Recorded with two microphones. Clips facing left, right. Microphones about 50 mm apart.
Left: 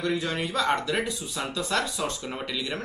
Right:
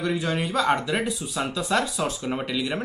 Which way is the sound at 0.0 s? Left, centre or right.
Centre.